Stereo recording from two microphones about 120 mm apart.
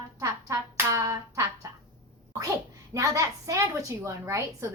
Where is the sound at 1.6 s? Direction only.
25° right (ahead or behind).